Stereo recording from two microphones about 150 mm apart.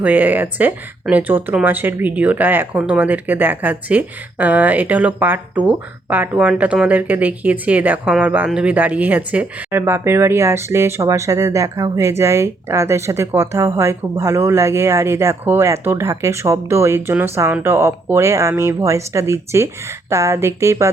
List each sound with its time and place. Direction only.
0.0 s speech: 10° right (ahead or behind)